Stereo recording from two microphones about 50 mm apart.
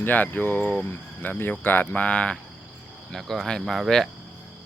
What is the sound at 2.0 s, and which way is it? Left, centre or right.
Speech, left.